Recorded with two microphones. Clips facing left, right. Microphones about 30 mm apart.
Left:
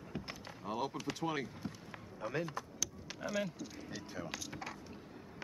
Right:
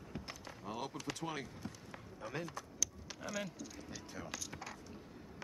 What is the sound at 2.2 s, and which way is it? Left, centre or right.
Speech, centre.